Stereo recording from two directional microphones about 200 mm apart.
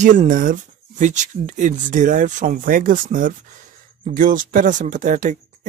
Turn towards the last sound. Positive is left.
turn(degrees=-40)  # may be behind; listen again after turning